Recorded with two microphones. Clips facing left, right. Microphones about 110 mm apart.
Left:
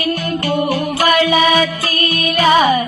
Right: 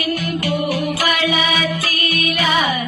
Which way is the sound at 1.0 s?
40° left (ahead or behind).